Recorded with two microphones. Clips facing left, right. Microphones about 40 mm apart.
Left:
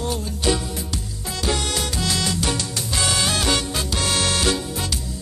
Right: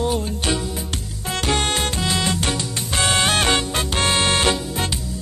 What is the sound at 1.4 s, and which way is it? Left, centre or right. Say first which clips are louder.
Music: right 3 dB; right.